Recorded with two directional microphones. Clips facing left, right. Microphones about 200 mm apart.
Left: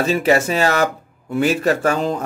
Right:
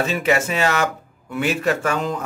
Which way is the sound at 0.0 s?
35° left (ahead or behind).